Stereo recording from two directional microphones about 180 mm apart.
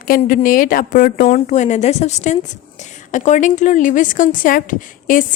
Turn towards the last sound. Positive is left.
turn(degrees=45)  # may be behind; listen again after turning